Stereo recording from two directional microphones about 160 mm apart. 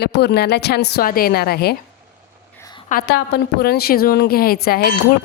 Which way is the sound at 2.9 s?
90° left.